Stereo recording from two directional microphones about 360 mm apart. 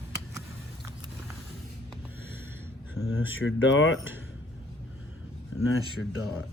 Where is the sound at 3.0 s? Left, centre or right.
Left.